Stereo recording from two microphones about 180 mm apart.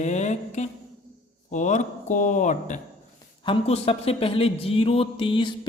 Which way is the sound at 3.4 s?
30° left (ahead or behind).